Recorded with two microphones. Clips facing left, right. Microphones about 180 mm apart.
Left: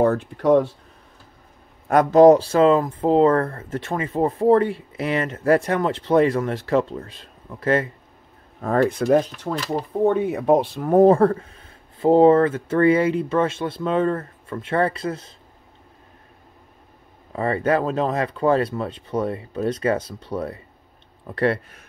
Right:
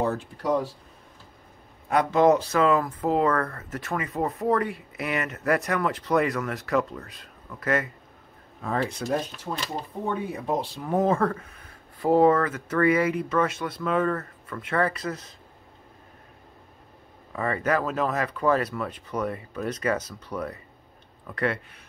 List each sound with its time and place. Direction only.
0.0 s speech: 55° left (ahead or behind)
1.9 s speech: 45° left (ahead or behind)
8.7 s speech: 55° left (ahead or behind)
11.0 s speech: 35° left (ahead or behind)
17.3 s speech: 30° left (ahead or behind)